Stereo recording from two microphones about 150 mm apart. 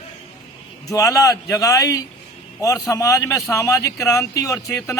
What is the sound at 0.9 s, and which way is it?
Speech, 20° left (ahead or behind).